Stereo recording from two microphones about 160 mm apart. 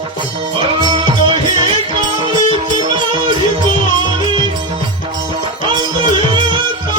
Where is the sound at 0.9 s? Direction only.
30° right (ahead or behind).